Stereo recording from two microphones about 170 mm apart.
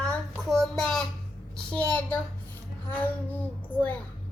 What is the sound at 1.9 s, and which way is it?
Child singing, 10° left (ahead or behind).